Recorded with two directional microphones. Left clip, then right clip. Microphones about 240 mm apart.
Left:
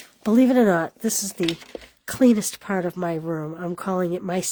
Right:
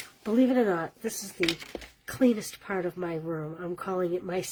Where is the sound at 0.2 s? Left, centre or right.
Left.